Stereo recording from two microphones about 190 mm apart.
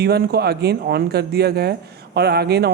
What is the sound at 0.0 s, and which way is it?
Speech, 55° right (ahead or behind).